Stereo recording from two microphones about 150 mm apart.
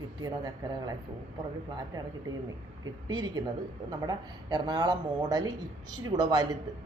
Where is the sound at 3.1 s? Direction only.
30° right (ahead or behind).